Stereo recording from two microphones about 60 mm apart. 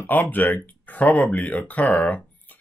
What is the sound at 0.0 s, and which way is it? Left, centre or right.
Speech, left.